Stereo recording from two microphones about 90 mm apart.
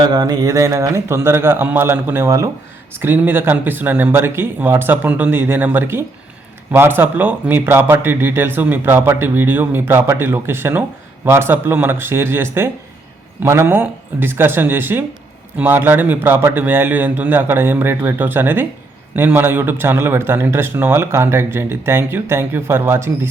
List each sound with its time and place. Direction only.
0.0 s speech: 50° right (ahead or behind); by 23.3 s 25° right (ahead or behind)